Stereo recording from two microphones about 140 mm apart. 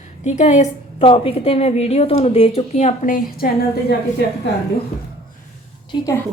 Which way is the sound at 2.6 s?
55° left (ahead or behind).